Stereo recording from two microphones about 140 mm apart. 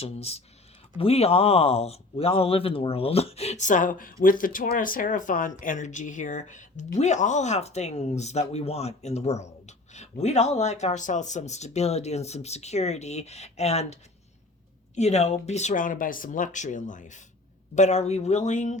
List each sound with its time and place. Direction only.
0.0 s speech: 45° left (ahead or behind)